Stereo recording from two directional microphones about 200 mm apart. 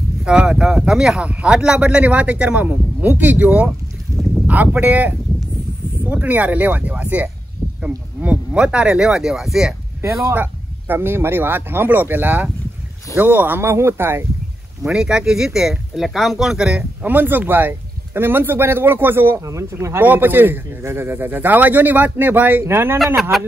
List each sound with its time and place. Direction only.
0.2 s speech: 5° right (ahead or behind)
4.1 s a sound: 15° right (ahead or behind)
4.5 s speech: 10° right (ahead or behind)
10.0 s speech: 10° right (ahead or behind)